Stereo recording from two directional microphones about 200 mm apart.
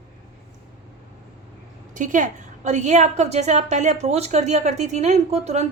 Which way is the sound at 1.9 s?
40° right (ahead or behind).